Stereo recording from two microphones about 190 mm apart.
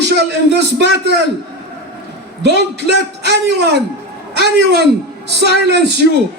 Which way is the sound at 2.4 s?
60° right (ahead or behind).